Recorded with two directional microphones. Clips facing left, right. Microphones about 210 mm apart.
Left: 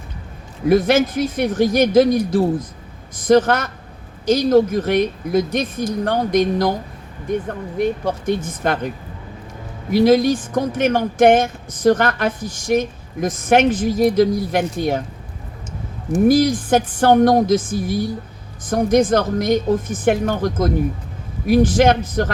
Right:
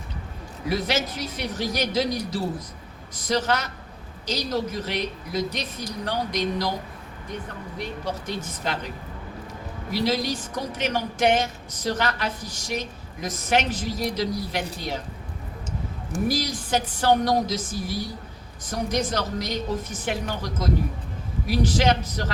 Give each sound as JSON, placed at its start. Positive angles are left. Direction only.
{"t": 0.7, "sound": "speech", "side_deg": 50}
{"t": 9.9, "sound": "speech", "side_deg": 50}
{"t": 16.2, "sound": "speech", "side_deg": 50}